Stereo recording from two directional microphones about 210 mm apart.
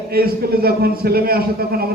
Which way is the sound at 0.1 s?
45° right (ahead or behind).